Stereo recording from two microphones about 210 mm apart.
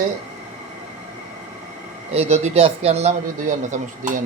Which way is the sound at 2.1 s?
30° right (ahead or behind).